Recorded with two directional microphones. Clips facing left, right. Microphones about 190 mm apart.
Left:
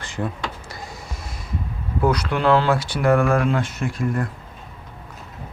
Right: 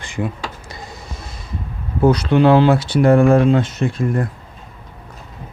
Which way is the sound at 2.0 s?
25° right (ahead or behind).